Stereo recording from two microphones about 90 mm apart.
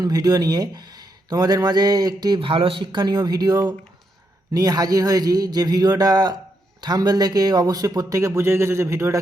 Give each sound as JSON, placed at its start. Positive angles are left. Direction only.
{"t": 0.0, "sound": "speech", "side_deg": -45}
{"t": 2.4, "sound": "speech", "side_deg": -85}